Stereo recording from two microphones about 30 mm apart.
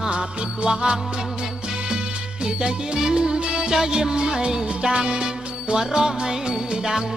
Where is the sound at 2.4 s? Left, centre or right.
Right.